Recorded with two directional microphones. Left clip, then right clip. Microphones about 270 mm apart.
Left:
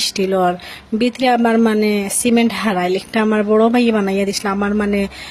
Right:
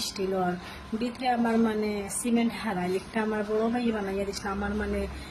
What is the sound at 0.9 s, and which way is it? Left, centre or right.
Speech, left.